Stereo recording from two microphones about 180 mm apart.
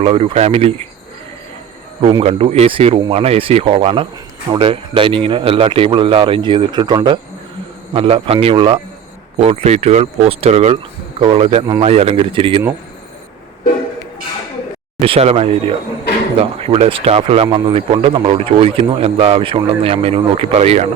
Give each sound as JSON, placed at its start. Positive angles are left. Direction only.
{"t": 0.0, "sound": "speech", "side_deg": -30}
{"t": 2.0, "sound": "speech", "side_deg": -30}
{"t": 15.0, "sound": "speech", "side_deg": -35}